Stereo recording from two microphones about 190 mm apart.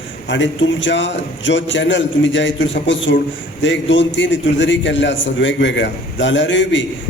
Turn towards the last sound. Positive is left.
turn(degrees=75)  # may be behind; listen again after turning